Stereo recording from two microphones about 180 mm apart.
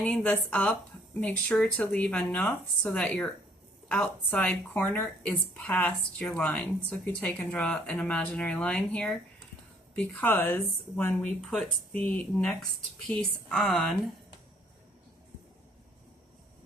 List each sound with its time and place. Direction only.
0.0 s speech: 5° left (ahead or behind)